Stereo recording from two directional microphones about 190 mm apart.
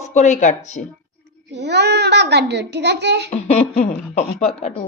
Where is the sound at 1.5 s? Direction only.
65° right (ahead or behind).